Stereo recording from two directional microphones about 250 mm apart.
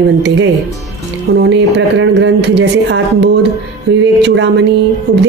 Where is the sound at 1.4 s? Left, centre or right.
Right.